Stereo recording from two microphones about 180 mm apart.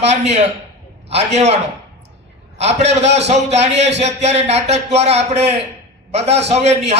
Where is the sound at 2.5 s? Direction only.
35° right (ahead or behind).